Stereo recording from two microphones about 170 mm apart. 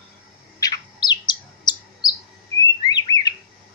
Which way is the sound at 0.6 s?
25° left (ahead or behind).